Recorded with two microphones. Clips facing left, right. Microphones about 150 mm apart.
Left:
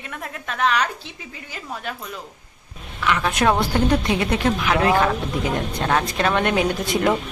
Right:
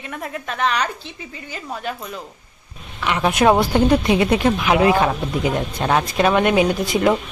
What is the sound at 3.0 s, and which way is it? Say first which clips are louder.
A woman's voice: right 3 dB; 20° right (ahead or behind).